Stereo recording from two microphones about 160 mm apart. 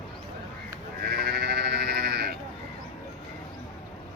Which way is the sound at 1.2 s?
80° right.